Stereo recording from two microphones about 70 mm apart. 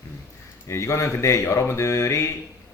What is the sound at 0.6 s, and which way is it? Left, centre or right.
Speech, left.